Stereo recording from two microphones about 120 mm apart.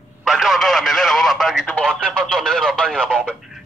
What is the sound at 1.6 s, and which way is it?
Speech, 10° left (ahead or behind).